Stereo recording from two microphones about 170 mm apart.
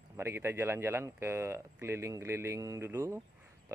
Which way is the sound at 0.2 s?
15° right (ahead or behind).